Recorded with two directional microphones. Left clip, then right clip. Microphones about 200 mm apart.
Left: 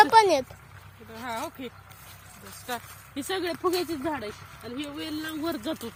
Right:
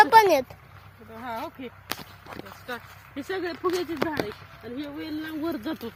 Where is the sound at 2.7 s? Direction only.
25° left (ahead or behind).